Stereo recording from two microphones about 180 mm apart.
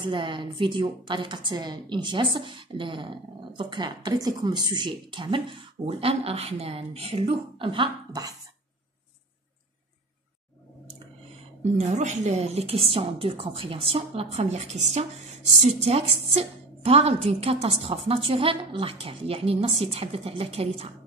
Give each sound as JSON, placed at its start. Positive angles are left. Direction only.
{"t": 0.0, "sound": "a woman's voice", "side_deg": -25}
{"t": 11.6, "sound": "a woman's voice", "side_deg": -40}